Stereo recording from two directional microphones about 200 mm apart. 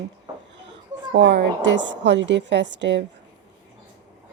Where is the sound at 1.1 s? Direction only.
65° right (ahead or behind).